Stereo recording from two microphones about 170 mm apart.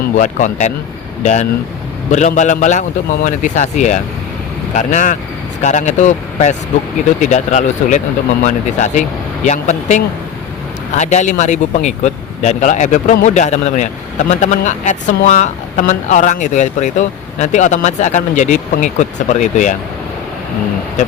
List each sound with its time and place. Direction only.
0.2 s speech: 45° left (ahead or behind)